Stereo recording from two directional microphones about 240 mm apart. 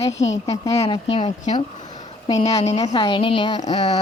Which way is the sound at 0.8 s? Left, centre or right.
Left.